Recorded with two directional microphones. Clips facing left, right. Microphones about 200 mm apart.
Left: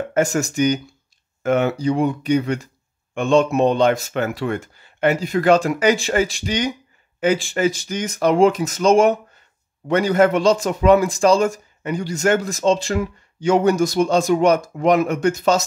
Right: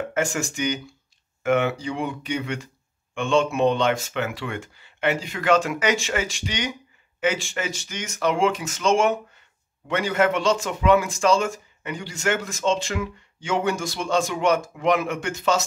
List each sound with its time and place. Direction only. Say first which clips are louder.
0.1 s speech: left 6 dB; 40° left (ahead or behind)